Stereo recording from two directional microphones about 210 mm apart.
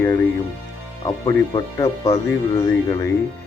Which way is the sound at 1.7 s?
15° left (ahead or behind).